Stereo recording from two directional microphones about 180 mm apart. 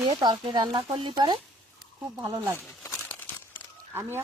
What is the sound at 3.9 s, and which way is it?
Speech, 10° right (ahead or behind).